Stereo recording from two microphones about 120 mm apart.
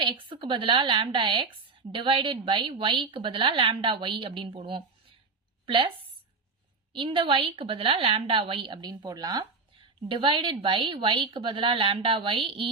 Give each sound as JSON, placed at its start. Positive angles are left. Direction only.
{"t": 0.0, "sound": "a woman's voice", "side_deg": -45}
{"t": 6.9, "sound": "a woman's voice", "side_deg": -45}
{"t": 9.4, "sound": "a woman's voice", "side_deg": -45}